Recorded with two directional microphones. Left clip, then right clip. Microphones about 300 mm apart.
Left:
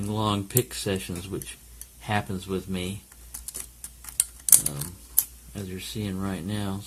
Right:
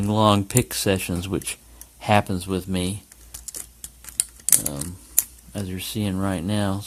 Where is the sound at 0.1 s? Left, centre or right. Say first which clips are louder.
Right 9 dB; right.